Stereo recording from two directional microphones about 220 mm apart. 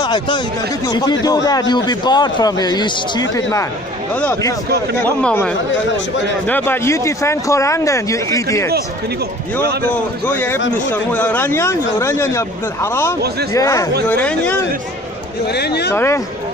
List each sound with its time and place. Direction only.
0.0 s a man's voice: 20° left (ahead or behind)
9.6 s a man's voice: 45° right (ahead or behind)
9.8 s a man's voice: 10° left (ahead or behind)
15.4 s speech: 50° left (ahead or behind)
15.9 s a man's voice: 10° left (ahead or behind)